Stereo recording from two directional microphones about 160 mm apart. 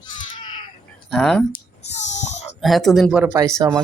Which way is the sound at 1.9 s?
45° left (ahead or behind).